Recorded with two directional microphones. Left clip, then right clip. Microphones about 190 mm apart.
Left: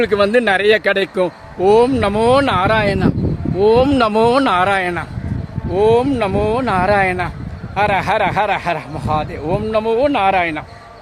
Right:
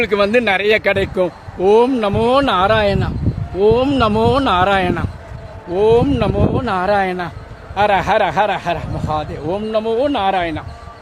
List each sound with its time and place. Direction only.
0.0 s speech: 10° left (ahead or behind); by 10.6 s 45° left (ahead or behind)